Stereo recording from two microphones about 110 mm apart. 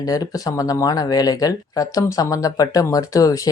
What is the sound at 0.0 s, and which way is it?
Speech, 35° left (ahead or behind).